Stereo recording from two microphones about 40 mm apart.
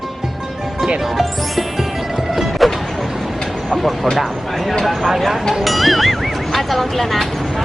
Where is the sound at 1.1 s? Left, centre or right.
Centre.